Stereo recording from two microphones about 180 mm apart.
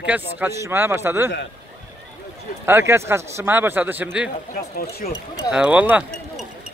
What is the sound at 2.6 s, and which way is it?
A man's voice, 15° right (ahead or behind).